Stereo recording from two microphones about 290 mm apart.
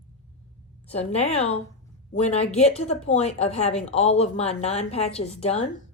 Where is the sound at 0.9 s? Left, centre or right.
Left.